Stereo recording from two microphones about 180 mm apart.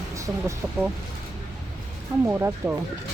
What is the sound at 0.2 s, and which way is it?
Speech, 15° right (ahead or behind).